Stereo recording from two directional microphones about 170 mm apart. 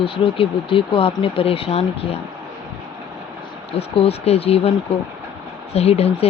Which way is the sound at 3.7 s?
35° left (ahead or behind).